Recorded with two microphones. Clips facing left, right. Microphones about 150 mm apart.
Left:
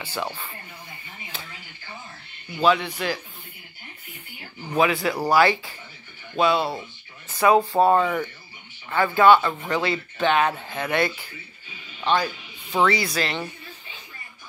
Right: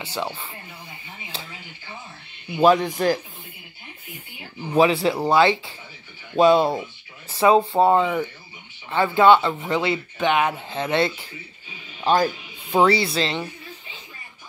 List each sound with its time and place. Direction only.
0.0 s speech: 15° right (ahead or behind)
2.6 s a man's voice: 45° right (ahead or behind)
4.7 s speech: 30° right (ahead or behind)
6.3 s speech: 40° right (ahead or behind)
7.2 s speech: 25° right (ahead or behind)
12.0 s a man's voice: 40° right (ahead or behind)
12.7 s speech: 30° right (ahead or behind)
13.4 s a sound: 20° right (ahead or behind)